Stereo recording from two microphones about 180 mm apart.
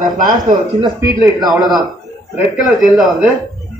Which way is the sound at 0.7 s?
20° right (ahead or behind).